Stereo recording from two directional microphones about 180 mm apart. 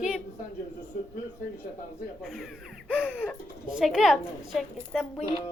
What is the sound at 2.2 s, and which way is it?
A woman's voice, centre (ahead or behind).